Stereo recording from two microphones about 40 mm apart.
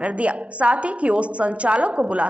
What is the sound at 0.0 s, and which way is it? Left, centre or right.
A woman's voice, right.